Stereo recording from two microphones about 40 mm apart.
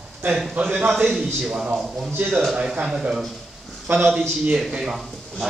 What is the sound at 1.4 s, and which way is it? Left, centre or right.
Speech, centre.